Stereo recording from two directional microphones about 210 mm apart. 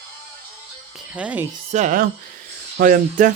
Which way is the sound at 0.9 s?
5° right (ahead or behind).